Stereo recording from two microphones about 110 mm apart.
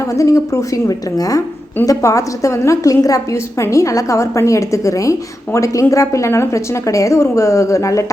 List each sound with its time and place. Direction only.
0.2 s a woman's voice: 30° left (ahead or behind)